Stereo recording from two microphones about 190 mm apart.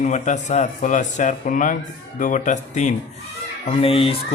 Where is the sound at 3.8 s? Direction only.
30° left (ahead or behind).